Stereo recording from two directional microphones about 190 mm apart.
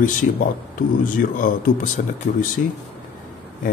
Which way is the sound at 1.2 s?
45° left (ahead or behind).